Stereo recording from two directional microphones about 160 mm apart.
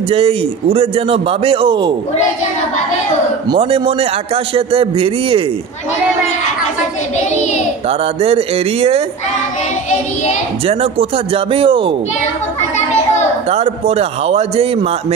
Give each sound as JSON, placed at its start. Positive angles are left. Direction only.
{"t": 0.1, "sound": "a man's voice", "side_deg": -35}
{"t": 3.4, "sound": "a man's voice", "side_deg": -30}
{"t": 8.0, "sound": "a man's voice", "side_deg": -35}
{"t": 10.7, "sound": "a man's voice", "side_deg": -35}
{"t": 13.5, "sound": "a man's voice", "side_deg": -40}